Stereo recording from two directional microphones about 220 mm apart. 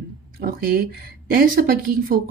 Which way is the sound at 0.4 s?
40° right (ahead or behind).